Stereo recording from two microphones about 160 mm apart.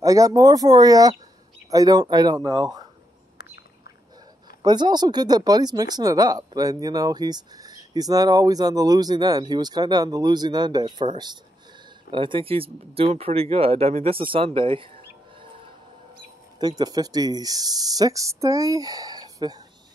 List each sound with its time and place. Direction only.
0.0 s speech: 20° right (ahead or behind)
4.6 s speech: 25° right (ahead or behind)
16.5 s speech: 25° right (ahead or behind)